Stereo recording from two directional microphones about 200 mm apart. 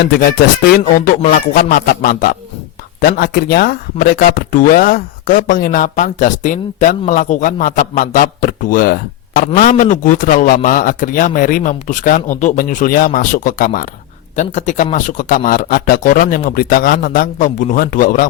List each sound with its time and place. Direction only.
0.0 s a man's voice: 50° left (ahead or behind)